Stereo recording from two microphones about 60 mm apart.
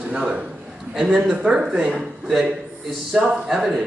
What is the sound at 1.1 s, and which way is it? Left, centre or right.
Speech, right.